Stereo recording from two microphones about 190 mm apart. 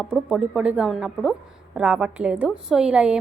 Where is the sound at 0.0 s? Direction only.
5° right (ahead or behind).